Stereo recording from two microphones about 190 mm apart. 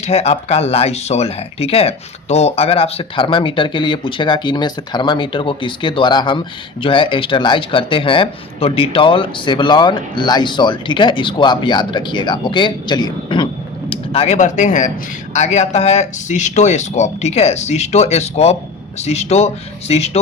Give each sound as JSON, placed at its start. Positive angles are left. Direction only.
{"t": 0.0, "sound": "speech", "side_deg": 35}